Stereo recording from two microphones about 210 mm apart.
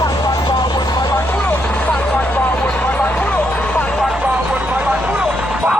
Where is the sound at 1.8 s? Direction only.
5° left (ahead or behind).